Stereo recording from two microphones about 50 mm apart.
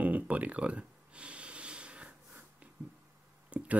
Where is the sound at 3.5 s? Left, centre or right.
Right.